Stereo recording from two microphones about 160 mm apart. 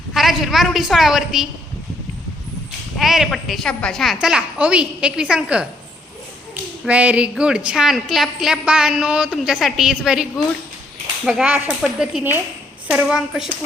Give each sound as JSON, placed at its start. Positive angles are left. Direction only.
{"t": 0.1, "sound": "a woman's voice", "side_deg": 0}
{"t": 3.0, "sound": "a woman's voice", "side_deg": 0}
{"t": 6.8, "sound": "a woman's voice", "side_deg": -10}